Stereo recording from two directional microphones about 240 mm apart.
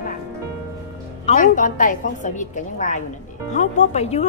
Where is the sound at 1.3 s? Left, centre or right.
Left.